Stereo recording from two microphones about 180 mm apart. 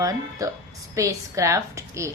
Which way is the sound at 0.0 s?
20° right (ahead or behind).